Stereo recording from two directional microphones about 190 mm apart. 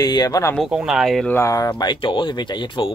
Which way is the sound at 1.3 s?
15° left (ahead or behind).